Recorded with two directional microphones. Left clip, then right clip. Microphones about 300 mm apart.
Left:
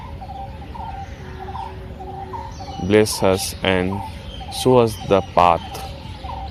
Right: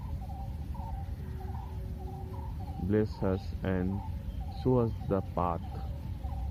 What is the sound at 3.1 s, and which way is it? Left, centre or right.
Speech, centre.